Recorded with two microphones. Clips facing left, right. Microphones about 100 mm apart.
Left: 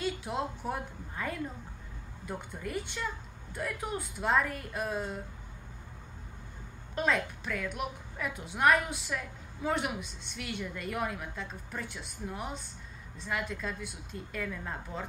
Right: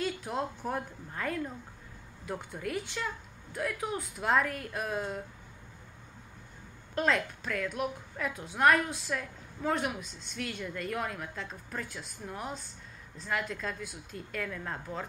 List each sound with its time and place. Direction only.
0.2 s a woman's voice: 5° left (ahead or behind)
7.0 s a woman's voice: 5° left (ahead or behind)